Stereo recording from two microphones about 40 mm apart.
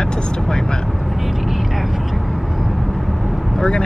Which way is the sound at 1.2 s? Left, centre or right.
Centre.